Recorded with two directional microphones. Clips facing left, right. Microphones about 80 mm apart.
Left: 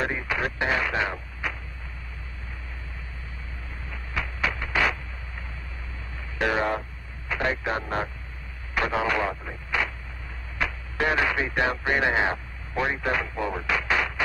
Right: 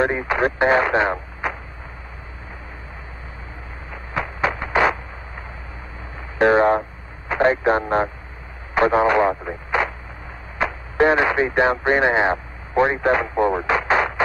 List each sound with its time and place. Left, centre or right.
0.0 s speech: right
3.9 s a sound: right
6.3 s speech: right